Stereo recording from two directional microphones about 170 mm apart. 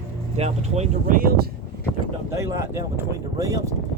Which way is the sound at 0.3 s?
40° right (ahead or behind).